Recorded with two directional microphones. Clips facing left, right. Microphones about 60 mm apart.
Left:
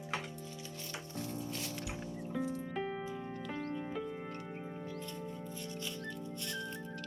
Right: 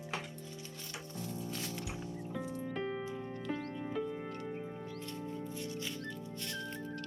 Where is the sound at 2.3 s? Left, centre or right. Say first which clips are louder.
Left 5 dB; centre.